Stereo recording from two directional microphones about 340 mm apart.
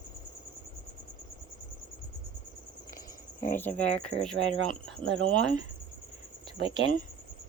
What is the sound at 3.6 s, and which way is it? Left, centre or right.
Speech, centre.